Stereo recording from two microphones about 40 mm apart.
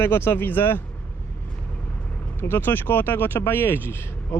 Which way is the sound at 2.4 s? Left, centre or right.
Left.